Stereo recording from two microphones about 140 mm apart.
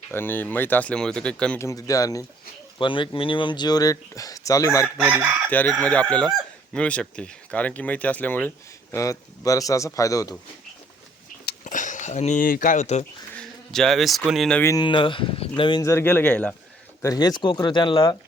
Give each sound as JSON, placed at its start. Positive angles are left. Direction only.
{"t": 0.1, "sound": "speech", "side_deg": 15}
{"t": 1.5, "sound": "speech", "side_deg": 25}
{"t": 2.7, "sound": "speech", "side_deg": 35}
{"t": 4.9, "sound": "chicken", "side_deg": -10}
{"t": 5.5, "sound": "speech", "side_deg": 10}
{"t": 11.6, "sound": "speech", "side_deg": 65}
{"t": 13.3, "sound": "a sound", "side_deg": 5}
{"t": 14.3, "sound": "speech", "side_deg": 0}
{"t": 14.6, "sound": "speech", "side_deg": 20}
{"t": 14.8, "sound": "speech", "side_deg": 35}
{"t": 15.8, "sound": "speech", "side_deg": 20}
{"t": 17.0, "sound": "speech", "side_deg": 25}